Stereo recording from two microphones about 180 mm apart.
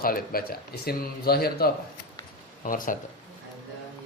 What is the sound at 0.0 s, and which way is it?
Speech, 55° left (ahead or behind).